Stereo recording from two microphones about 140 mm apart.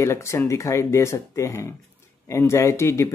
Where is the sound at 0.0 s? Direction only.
20° left (ahead or behind).